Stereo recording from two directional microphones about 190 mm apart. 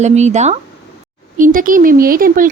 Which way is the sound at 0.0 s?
35° right (ahead or behind).